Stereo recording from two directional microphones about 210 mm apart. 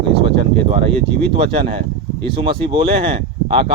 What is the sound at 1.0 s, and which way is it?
Speech, 25° right (ahead or behind).